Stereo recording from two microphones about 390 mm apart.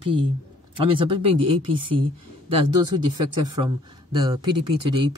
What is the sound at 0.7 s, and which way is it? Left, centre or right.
Speech, centre.